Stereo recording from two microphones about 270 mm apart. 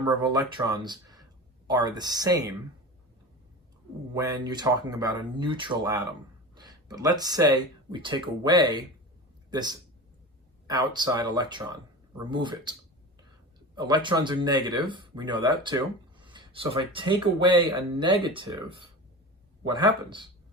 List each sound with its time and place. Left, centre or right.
0.0 s speech: centre
4.1 s a man's voice: centre
13.7 s speech: centre
19.6 s speech: centre